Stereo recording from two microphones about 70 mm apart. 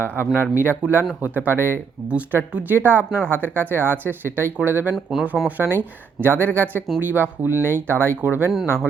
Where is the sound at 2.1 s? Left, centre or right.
Right.